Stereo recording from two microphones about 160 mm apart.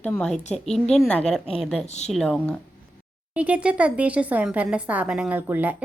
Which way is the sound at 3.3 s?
10° right (ahead or behind).